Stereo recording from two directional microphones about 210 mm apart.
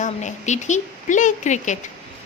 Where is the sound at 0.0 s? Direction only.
35° left (ahead or behind).